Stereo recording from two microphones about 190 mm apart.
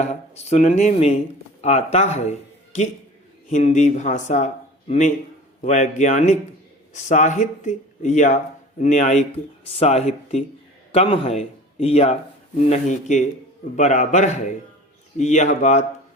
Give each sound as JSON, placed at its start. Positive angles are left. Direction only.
{"t": 0.0, "sound": "speech", "side_deg": 35}